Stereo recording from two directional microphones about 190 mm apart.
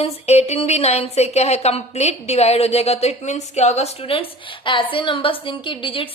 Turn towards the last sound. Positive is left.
turn(degrees=25)  # may be behind; listen again after turning